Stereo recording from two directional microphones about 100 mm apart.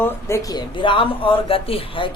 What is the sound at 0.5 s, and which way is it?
Speech, 55° left (ahead or behind).